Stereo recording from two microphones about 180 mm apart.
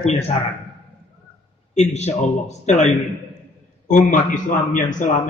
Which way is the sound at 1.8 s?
40° left (ahead or behind).